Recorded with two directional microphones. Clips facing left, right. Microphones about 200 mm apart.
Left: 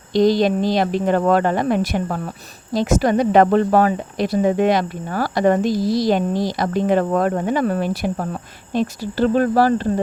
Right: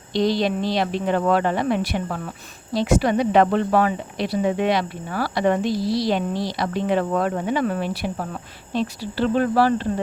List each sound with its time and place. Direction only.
0.1 s speech: 45° left (ahead or behind)